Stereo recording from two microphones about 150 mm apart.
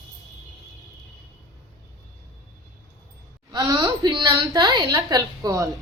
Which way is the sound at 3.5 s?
30° right (ahead or behind).